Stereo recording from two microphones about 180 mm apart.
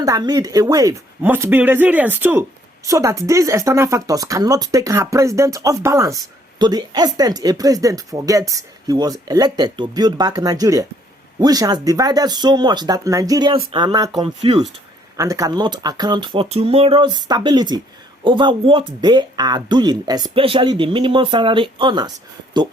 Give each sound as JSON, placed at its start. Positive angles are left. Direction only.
{"t": 0.0, "sound": "speech", "side_deg": -20}
{"t": 15.1, "sound": "speech", "side_deg": -20}